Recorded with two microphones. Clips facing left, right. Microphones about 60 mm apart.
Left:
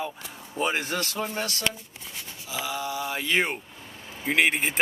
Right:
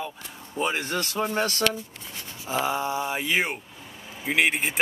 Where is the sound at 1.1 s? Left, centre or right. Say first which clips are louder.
Right 4 dB; centre.